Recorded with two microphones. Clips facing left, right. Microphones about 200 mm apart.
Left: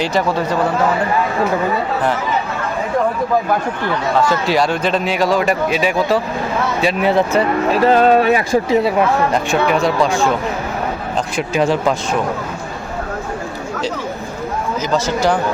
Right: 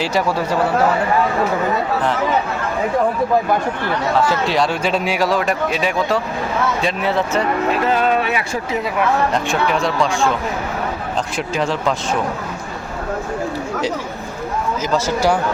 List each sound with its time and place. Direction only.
0.0 s speech: 5° right (ahead or behind)
4.3 s speech: centre (ahead or behind)
7.0 s speech: 15° left (ahead or behind)
7.7 s speech: 35° left (ahead or behind)
9.3 s speech: 5° left (ahead or behind)
11.5 s speech: 10° left (ahead or behind)
14.9 s speech: 10° right (ahead or behind)